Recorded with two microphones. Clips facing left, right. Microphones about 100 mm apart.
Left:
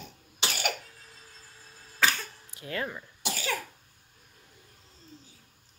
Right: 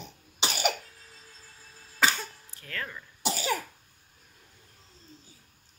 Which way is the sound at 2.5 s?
15° left (ahead or behind).